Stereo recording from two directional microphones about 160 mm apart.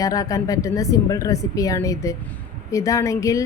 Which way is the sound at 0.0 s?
20° left (ahead or behind).